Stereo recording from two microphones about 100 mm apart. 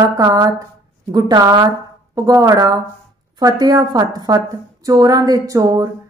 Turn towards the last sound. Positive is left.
turn(degrees=-35)  # may be behind; listen again after turning